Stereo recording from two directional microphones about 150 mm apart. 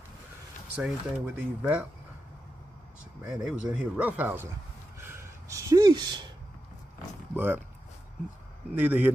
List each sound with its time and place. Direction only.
0.7 s speech: 5° right (ahead or behind)
3.3 s speech: 5° right (ahead or behind)
4.9 s a sound: 15° right (ahead or behind)
7.3 s speech: 10° right (ahead or behind)
8.7 s speech: 10° right (ahead or behind)